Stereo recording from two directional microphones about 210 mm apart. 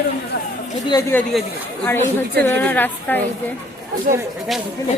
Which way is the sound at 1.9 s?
10° left (ahead or behind).